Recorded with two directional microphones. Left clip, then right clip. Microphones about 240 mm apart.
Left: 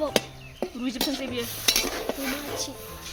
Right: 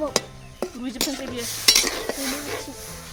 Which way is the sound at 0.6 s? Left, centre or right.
Centre.